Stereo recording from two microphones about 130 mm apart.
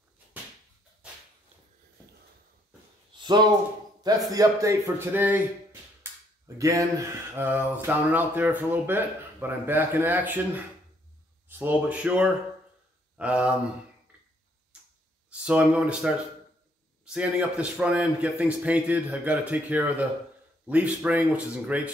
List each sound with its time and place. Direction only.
3.2 s a sound: 35° right (ahead or behind)
4.3 s speech: 25° right (ahead or behind); by 13.6 s 10° right (ahead or behind)
15.3 s speech: 10° right (ahead or behind)